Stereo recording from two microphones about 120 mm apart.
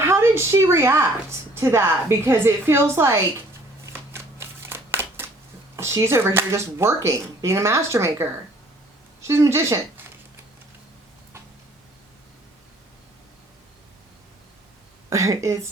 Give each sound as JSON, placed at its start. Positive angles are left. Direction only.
{"t": 0.0, "sound": "a woman's voice", "side_deg": -20}
{"t": 3.9, "sound": "shuffling cards", "side_deg": -20}
{"t": 5.7, "sound": "a woman's voice", "side_deg": -25}
{"t": 15.1, "sound": "a woman's voice", "side_deg": -25}